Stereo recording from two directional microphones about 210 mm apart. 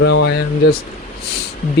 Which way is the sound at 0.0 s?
55° left (ahead or behind).